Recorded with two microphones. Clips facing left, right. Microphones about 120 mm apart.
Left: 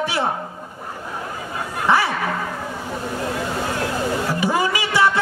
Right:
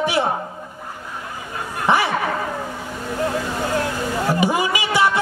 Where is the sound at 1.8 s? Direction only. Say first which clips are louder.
Even; 20° right (ahead or behind).